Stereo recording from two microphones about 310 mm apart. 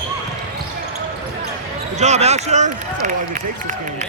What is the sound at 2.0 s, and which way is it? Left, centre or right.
Speech, right.